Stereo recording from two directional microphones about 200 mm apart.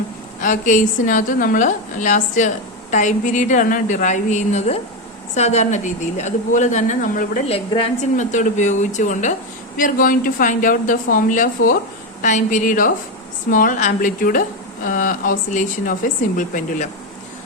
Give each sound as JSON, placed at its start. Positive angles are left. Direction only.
{"t": 0.4, "sound": "a woman's voice", "side_deg": 40}
{"t": 7.4, "sound": "a woman's voice", "side_deg": 30}